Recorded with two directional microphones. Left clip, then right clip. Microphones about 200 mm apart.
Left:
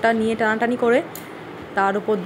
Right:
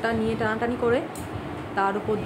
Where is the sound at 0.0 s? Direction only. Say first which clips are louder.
Left 6 dB; 25° left (ahead or behind).